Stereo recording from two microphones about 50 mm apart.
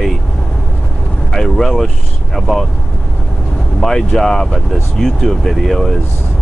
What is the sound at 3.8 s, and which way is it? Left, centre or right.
Speech, centre.